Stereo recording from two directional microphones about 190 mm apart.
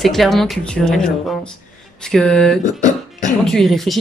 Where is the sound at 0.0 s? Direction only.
Centre (ahead or behind).